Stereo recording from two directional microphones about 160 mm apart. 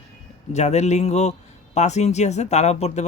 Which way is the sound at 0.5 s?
45° left (ahead or behind).